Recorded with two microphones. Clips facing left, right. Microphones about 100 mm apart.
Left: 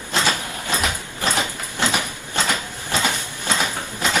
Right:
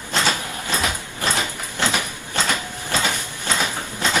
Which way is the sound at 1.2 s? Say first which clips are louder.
Left 1 dB; 20° left (ahead or behind).